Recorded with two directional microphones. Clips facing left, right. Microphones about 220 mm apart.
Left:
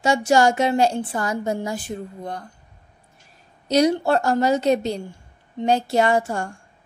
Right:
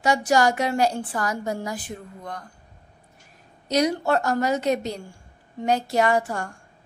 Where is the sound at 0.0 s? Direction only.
25° left (ahead or behind).